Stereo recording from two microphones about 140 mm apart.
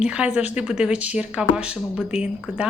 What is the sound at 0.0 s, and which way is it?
Speech, 5° right (ahead or behind).